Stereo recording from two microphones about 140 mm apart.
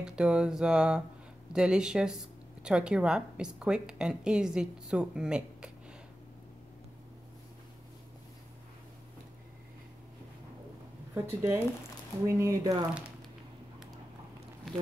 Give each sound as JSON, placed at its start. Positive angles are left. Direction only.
{"t": 0.0, "sound": "speech", "side_deg": -5}
{"t": 11.1, "sound": "speech", "side_deg": -15}